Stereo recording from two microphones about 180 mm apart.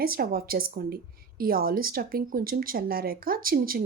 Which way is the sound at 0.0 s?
55° right (ahead or behind).